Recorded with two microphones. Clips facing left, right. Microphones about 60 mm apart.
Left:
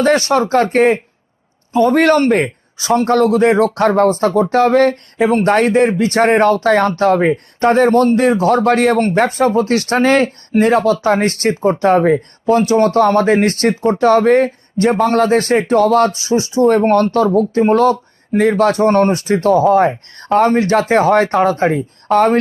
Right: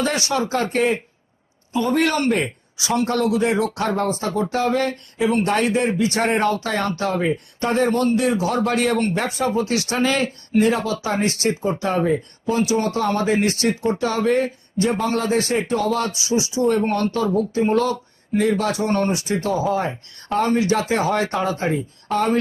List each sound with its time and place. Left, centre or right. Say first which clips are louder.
0.0 s speech: left 9 dB; left